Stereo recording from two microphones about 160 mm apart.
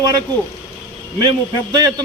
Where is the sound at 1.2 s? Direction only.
30° right (ahead or behind).